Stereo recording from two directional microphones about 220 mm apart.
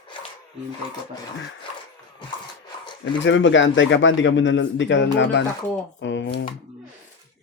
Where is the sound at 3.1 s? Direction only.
60° left (ahead or behind).